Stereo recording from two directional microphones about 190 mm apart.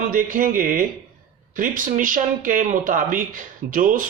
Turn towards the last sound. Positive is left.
turn(degrees=-45)  # may be behind; listen again after turning